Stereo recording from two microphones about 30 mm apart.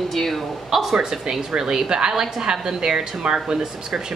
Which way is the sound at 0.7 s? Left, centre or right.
Centre.